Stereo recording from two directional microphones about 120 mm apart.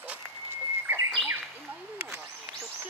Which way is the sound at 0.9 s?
20° right (ahead or behind).